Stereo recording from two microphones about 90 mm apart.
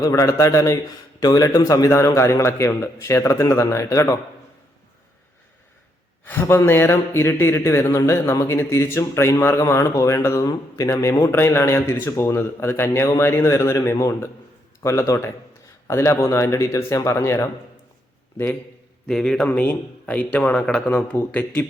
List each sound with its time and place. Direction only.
0.0 s a man's voice: 40° left (ahead or behind)
6.4 s a man's voice: 30° left (ahead or behind)
19.0 s a man's voice: 5° left (ahead or behind)